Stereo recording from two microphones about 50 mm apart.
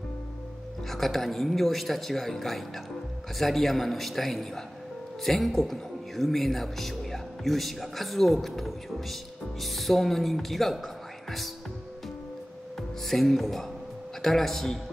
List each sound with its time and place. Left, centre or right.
0.8 s a man's voice: centre
13.0 s a man's voice: centre